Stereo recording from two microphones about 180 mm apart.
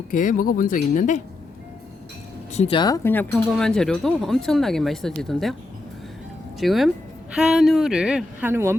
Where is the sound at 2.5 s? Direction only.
35° left (ahead or behind).